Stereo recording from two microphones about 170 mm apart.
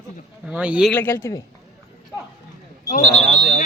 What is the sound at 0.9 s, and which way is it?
Speech, 10° left (ahead or behind).